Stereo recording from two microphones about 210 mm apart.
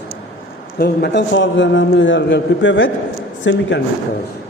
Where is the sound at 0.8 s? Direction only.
50° left (ahead or behind); by 3.6 s 65° left (ahead or behind).